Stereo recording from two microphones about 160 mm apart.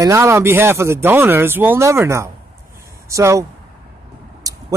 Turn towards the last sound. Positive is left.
turn(degrees=-20)  # may be behind; listen again after turning